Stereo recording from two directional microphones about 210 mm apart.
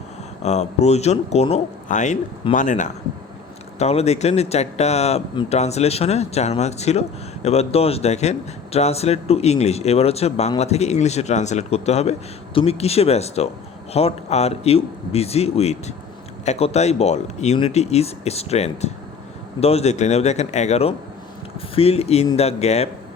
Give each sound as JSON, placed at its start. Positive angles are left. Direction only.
{"t": 0.4, "sound": "speech", "side_deg": 30}